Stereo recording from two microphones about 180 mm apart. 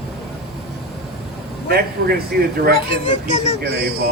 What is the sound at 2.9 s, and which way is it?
Speech, 40° left (ahead or behind).